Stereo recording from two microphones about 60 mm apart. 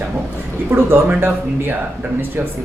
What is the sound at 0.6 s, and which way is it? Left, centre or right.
Speech, right.